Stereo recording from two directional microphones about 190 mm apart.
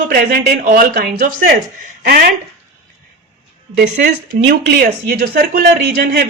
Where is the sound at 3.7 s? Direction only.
40° right (ahead or behind).